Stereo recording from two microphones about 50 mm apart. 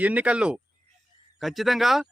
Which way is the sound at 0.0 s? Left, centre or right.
Right.